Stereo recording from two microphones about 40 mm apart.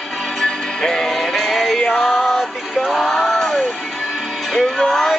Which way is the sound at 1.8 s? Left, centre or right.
Left.